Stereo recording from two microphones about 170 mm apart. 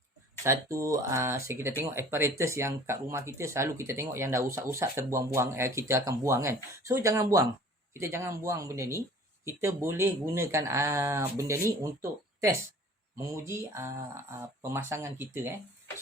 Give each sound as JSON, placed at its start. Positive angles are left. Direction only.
{"t": 0.4, "sound": "speech", "side_deg": -15}
{"t": 13.1, "sound": "speech", "side_deg": -15}